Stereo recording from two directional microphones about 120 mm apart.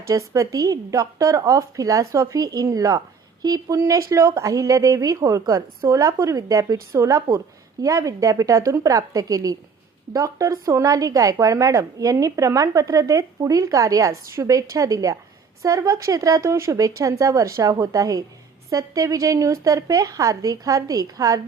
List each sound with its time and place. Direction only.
0.1 s speech: 30° right (ahead or behind)